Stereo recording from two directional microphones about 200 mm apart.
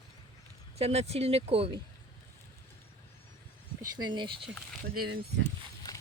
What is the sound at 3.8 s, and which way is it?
Speech, 20° right (ahead or behind).